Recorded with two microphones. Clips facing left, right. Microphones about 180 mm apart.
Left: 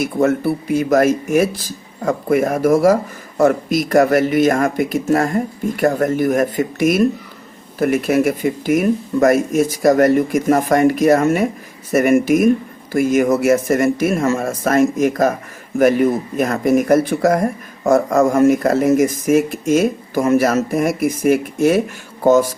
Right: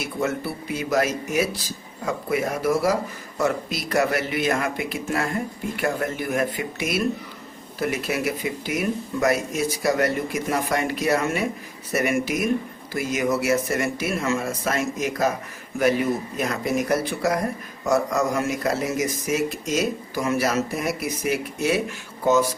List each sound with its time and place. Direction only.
0.0 s speech: 50° left (ahead or behind)